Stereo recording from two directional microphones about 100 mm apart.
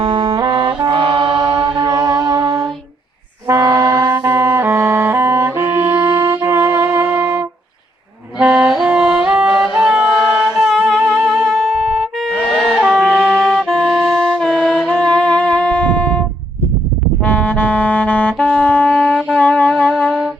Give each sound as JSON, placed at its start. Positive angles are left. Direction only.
{"t": 0.0, "sound": "music", "side_deg": -60}
{"t": 0.9, "sound": "chant", "side_deg": -55}
{"t": 3.4, "sound": "music", "side_deg": -30}
{"t": 9.7, "sound": "a sound", "side_deg": -10}
{"t": 10.6, "sound": "wind instrument", "side_deg": -5}
{"t": 12.3, "sound": "wind instrument", "side_deg": 5}
{"t": 13.4, "sound": "saxophone", "side_deg": 5}
{"t": 17.2, "sound": "music", "side_deg": 15}